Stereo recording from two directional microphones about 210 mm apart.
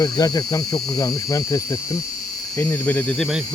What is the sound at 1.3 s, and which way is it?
Speech, 15° left (ahead or behind).